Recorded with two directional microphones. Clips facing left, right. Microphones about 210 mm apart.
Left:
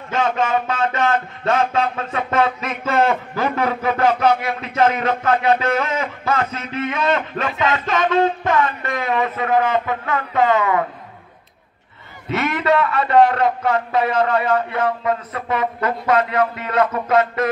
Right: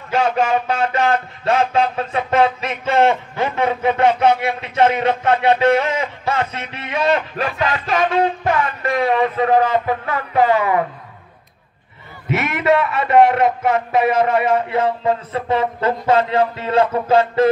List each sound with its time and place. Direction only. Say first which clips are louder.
0.1 s a man's voice: right 2 dB; 30° right (ahead or behind)
8.8 s a man's voice: right 4 dB; 30° right (ahead or behind)
12.4 s a man's voice: right 1 dB; 25° right (ahead or behind)